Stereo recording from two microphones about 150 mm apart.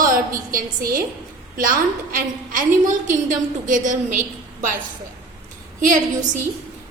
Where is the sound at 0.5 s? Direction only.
70° right (ahead or behind).